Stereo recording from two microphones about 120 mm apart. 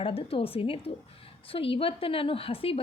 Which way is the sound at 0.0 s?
50° left (ahead or behind).